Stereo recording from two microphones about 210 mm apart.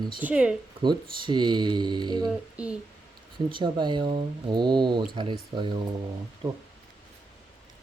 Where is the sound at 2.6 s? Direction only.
5° right (ahead or behind).